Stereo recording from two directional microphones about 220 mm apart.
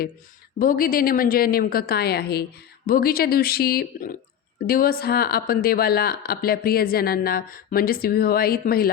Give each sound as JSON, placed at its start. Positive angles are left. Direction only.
{"t": 0.6, "sound": "a woman's voice", "side_deg": 40}